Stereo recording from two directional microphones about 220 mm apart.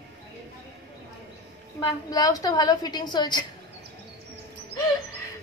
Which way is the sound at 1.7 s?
15° left (ahead or behind).